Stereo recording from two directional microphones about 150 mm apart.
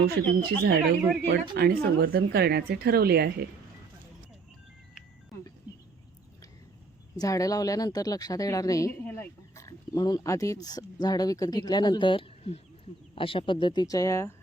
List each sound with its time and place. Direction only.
0.0 s speech: 90° right
7.2 s speech: 25° left (ahead or behind)